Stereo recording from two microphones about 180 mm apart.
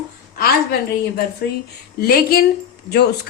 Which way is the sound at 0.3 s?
60° left (ahead or behind).